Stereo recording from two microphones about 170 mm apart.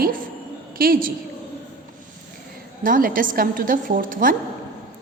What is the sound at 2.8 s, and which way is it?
A woman's voice, 55° right (ahead or behind).